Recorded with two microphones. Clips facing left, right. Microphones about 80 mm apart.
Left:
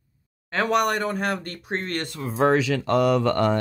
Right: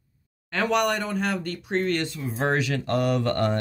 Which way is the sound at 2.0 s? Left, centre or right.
Left.